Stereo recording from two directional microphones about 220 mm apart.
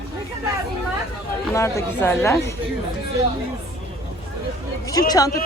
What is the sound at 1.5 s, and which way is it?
Speech, 10° left (ahead or behind).